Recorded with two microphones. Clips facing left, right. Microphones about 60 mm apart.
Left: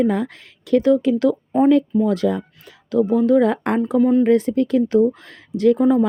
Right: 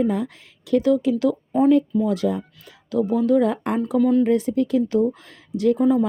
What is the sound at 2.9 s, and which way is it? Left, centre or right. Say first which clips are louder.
Speech: left 3 dB; left.